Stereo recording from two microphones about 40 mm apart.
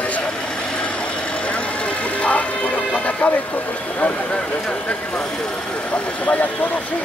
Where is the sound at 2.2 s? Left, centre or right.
Left.